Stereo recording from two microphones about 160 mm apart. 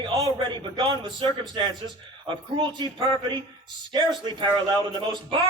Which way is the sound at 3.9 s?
30° right (ahead or behind).